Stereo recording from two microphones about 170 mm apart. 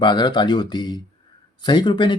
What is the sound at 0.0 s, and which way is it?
Speech, 25° left (ahead or behind).